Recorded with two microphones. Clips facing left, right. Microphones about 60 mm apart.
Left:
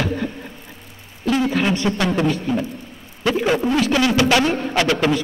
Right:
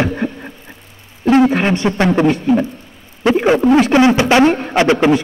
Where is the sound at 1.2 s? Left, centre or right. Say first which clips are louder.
Right 7 dB; right.